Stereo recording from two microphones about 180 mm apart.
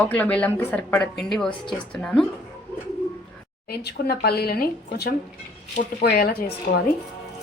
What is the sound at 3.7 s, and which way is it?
Speech, 60° left (ahead or behind).